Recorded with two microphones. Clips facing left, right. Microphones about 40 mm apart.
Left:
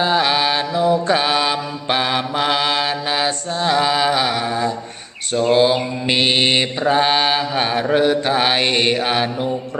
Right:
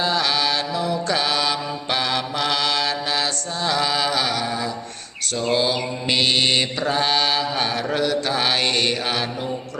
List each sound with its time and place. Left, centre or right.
0.0 s mantra: left